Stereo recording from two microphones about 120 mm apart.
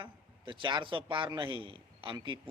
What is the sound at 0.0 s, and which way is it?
A man's voice, 45° right (ahead or behind).